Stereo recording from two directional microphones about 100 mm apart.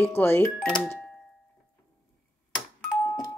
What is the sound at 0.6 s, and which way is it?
Speech, 5° left (ahead or behind).